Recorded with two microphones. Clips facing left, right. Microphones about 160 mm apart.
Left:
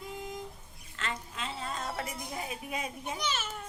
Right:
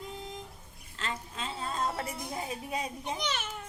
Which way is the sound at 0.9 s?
30° right (ahead or behind).